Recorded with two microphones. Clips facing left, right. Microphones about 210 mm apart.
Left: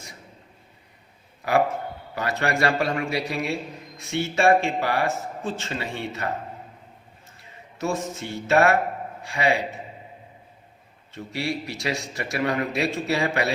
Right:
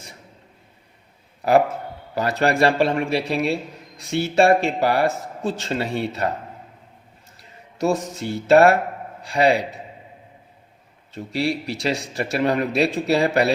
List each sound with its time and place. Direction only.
2.1 s speech: 35° right (ahead or behind)
7.9 s speech: 35° right (ahead or behind)
11.1 s speech: 35° right (ahead or behind)